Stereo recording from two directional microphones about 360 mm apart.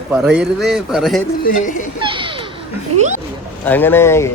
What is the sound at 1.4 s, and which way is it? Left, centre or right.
Speech, left.